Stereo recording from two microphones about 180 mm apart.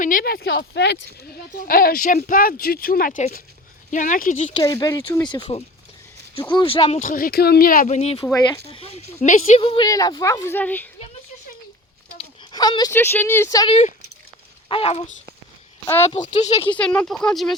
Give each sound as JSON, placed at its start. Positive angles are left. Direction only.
{"t": 0.0, "sound": "speech", "side_deg": 50}
{"t": 1.6, "sound": "speech", "side_deg": 55}
{"t": 4.5, "sound": "a woman's voice", "side_deg": 20}
{"t": 12.1, "sound": "a sound", "side_deg": 25}
{"t": 12.9, "sound": "speech", "side_deg": 10}
{"t": 14.7, "sound": "speech", "side_deg": 30}
{"t": 16.4, "sound": "a woman's voice", "side_deg": 30}
{"t": 16.7, "sound": "speech", "side_deg": 5}